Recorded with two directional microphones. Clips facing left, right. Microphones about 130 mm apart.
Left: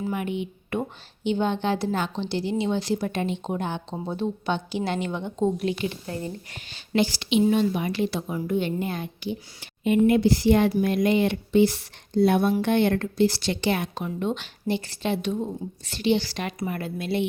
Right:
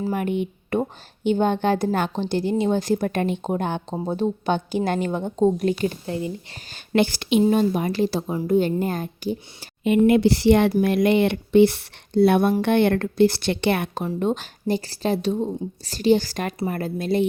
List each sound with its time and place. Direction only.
0.0 s a woman's voice: 45° right (ahead or behind)
6.9 s a woman's voice: 55° right (ahead or behind)
10.1 s speech: 75° right (ahead or behind)
14.0 s speech: 40° right (ahead or behind)